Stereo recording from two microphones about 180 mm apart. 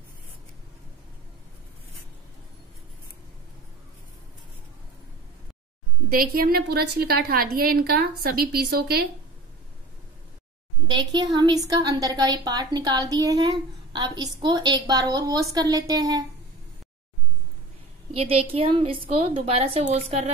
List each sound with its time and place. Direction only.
6.0 s a woman's voice: 55° right (ahead or behind)
10.9 s a woman's voice: 25° right (ahead or behind)
18.1 s a woman's voice: 30° right (ahead or behind)